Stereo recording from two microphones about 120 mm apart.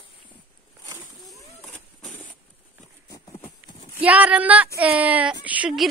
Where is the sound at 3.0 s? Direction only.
30° left (ahead or behind).